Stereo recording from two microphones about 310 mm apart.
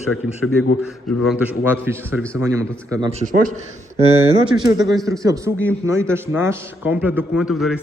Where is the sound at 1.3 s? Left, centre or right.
Centre.